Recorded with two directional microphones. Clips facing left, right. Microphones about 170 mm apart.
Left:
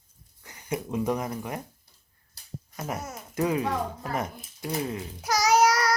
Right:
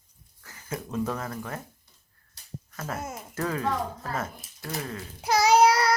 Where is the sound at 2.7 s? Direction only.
15° left (ahead or behind).